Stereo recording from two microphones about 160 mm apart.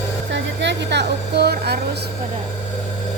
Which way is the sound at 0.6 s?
90° right.